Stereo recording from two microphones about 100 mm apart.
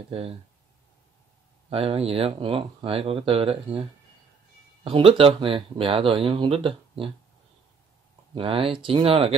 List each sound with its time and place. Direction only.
1.7 s speech: 70° right (ahead or behind)
4.8 s speech: 65° right (ahead or behind)
8.4 s speech: 65° right (ahead or behind)